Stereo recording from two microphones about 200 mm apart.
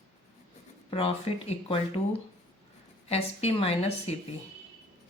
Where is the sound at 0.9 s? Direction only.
30° left (ahead or behind).